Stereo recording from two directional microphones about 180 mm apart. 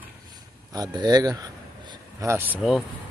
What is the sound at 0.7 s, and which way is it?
Speech, 20° right (ahead or behind).